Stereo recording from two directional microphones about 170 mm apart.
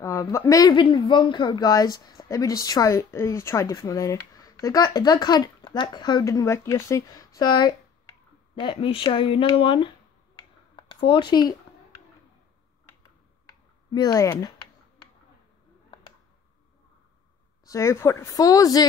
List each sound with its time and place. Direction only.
0.0 s speech: 15° left (ahead or behind)
11.1 s speech: 30° left (ahead or behind)
13.9 s speech: 20° left (ahead or behind)
17.6 s speech: 15° left (ahead or behind)